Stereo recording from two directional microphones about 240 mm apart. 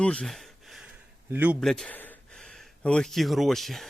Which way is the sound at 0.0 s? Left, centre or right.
Centre.